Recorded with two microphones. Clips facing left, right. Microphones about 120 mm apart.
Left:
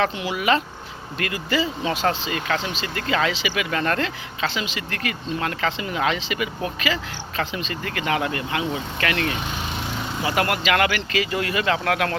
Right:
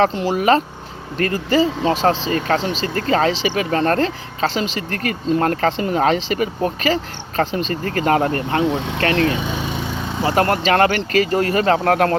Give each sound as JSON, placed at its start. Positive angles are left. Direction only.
{"t": 0.0, "sound": "speech", "side_deg": -35}
{"t": 8.7, "sound": "speech", "side_deg": -80}
{"t": 9.0, "sound": "speech", "side_deg": -35}